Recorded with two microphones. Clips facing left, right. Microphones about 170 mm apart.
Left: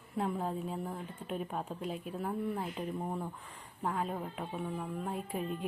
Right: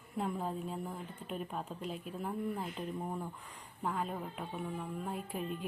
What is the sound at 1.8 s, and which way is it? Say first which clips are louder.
Speech: left 3 dB; 45° left (ahead or behind).